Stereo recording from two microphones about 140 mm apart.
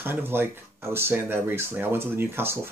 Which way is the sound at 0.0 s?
15° right (ahead or behind).